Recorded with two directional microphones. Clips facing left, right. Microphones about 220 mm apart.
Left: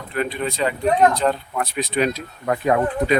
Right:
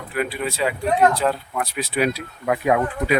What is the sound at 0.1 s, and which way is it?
Speech, 5° right (ahead or behind).